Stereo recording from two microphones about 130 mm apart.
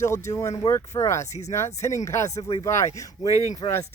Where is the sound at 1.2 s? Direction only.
60° left (ahead or behind).